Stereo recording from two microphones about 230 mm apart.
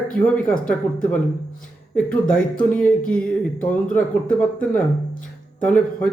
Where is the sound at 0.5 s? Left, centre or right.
Left.